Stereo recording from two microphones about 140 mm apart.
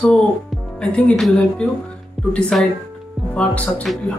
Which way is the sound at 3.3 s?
10° left (ahead or behind).